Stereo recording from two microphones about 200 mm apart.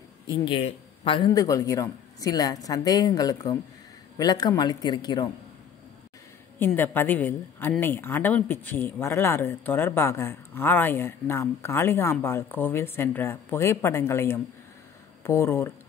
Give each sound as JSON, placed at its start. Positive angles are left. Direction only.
{"t": 0.3, "sound": "a man's voice", "side_deg": 25}
{"t": 6.6, "sound": "a woman's voice", "side_deg": 10}